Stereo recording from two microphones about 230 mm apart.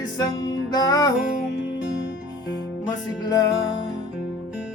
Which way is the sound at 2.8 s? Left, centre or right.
Centre.